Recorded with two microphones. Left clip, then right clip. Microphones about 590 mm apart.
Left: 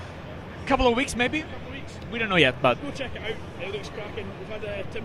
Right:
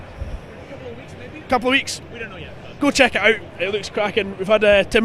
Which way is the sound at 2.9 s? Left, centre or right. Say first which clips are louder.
Right 18 dB; right.